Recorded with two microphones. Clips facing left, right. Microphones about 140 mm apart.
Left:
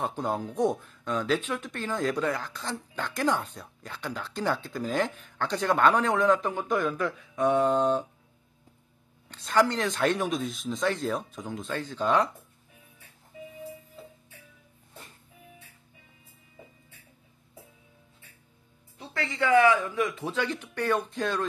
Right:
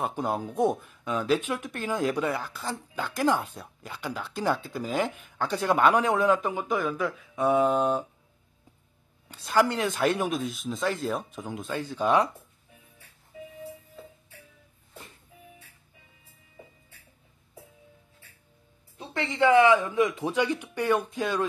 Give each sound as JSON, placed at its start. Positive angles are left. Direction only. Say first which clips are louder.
{"t": 0.0, "sound": "speech", "louder": "right 1 dB", "side_deg": -10}
{"t": 9.3, "sound": "speech", "louder": "even", "side_deg": -10}
{"t": 18.9, "sound": "speech", "louder": "right 4 dB", "side_deg": -20}